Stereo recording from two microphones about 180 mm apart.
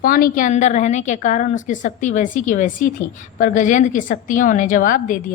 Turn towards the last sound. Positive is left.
turn(degrees=50)  # may be behind; listen again after turning